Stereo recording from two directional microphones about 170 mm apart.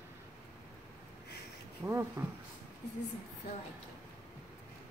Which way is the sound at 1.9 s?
15° right (ahead or behind).